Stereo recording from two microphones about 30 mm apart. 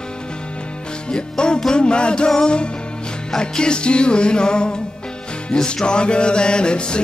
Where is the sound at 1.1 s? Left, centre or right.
Left.